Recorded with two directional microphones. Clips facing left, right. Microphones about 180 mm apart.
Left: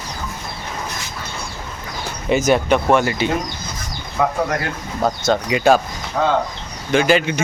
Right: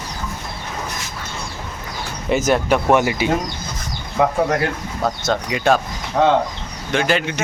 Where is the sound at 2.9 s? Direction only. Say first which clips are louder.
Right 2 dB; 15° right (ahead or behind).